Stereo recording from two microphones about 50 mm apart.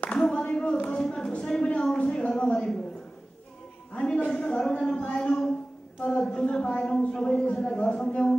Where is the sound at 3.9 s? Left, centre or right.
Left.